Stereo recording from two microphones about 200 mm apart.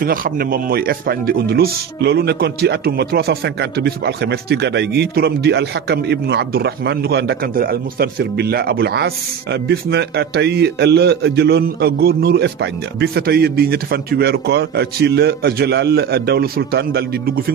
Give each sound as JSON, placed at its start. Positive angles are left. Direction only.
{"t": 0.0, "sound": "speech", "side_deg": -45}